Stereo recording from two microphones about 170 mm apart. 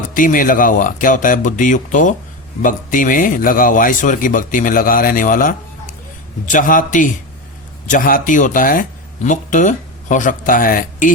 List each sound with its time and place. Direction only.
0.1 s a man's voice: 50° left (ahead or behind)